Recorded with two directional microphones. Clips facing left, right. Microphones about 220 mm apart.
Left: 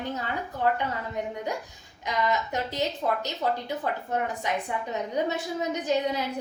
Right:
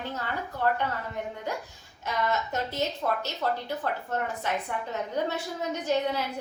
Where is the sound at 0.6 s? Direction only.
15° left (ahead or behind).